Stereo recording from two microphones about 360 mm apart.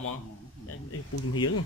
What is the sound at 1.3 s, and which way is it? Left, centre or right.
Speech, left.